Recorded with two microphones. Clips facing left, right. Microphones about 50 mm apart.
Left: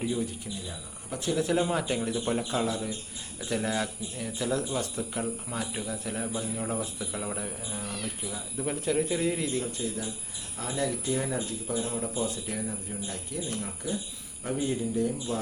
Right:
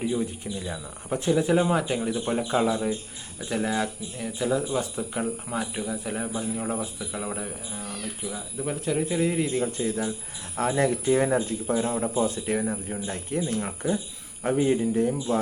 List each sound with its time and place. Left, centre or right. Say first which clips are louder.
0.0 s speech: right 3 dB; centre
0.7 s speech: right 8 dB; right
1.3 s speech: right 5 dB; centre
2.5 s a man's voice: right 6 dB; right
3.5 s speech: right 3 dB; centre
9.6 s speech: right 6 dB; right